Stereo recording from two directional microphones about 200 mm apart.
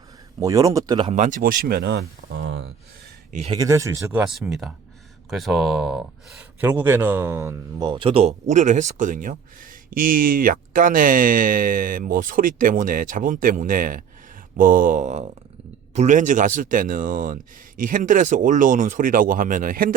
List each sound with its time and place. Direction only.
0.4 s speech: 15° right (ahead or behind)
1.1 s speech: 40° right (ahead or behind); by 2.0 s 55° right (ahead or behind)
3.4 s speech: 20° right (ahead or behind)
4.2 s speech: 5° right (ahead or behind); by 19.9 s 45° right (ahead or behind)